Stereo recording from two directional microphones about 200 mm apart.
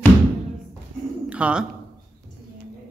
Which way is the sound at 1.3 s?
5° right (ahead or behind).